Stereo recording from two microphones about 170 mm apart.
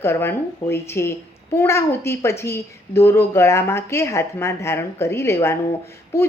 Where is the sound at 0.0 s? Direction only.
15° left (ahead or behind).